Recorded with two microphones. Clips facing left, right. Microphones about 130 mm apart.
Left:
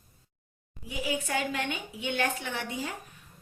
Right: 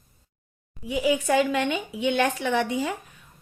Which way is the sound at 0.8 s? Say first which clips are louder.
Right 9 dB; 90° right.